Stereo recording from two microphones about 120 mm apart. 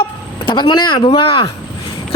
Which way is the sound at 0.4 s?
40° left (ahead or behind).